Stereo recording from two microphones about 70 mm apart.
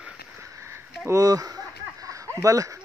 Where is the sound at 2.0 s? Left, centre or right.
Right.